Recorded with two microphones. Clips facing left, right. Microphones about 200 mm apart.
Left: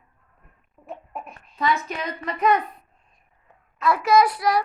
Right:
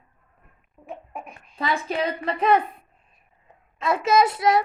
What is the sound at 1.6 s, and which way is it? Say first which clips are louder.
A woman's voice: even; 30° right (ahead or behind).